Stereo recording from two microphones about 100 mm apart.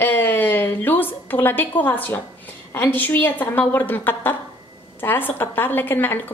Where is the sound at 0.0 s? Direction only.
20° left (ahead or behind).